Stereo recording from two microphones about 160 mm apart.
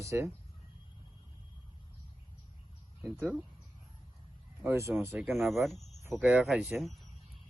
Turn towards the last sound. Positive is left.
turn(degrees=0)  # may be behind; listen again after turning